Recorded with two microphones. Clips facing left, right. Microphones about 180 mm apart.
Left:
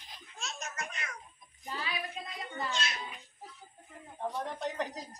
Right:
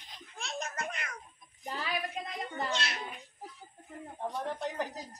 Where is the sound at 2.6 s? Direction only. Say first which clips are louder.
Right 1 dB; 65° right (ahead or behind).